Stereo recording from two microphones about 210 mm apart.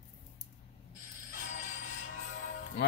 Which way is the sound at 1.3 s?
40° left (ahead or behind).